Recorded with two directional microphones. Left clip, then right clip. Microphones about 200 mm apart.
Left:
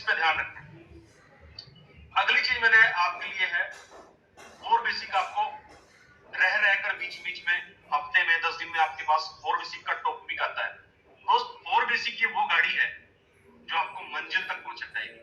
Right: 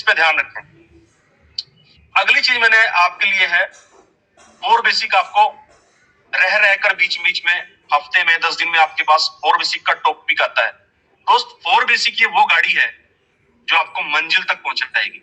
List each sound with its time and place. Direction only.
0.0 s a man's voice: 45° right (ahead or behind)
2.1 s a man's voice: 45° right (ahead or behind)